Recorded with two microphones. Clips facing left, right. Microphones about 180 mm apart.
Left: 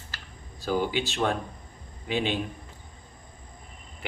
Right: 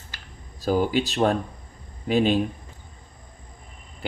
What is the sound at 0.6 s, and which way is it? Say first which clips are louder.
Speech: right 5 dB; 40° right (ahead or behind).